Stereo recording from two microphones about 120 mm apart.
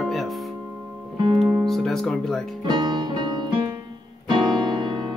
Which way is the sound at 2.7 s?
40° right (ahead or behind).